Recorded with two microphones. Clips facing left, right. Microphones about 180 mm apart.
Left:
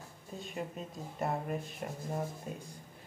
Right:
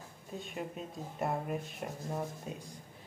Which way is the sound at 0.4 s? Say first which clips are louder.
Left 1 dB; centre (ahead or behind).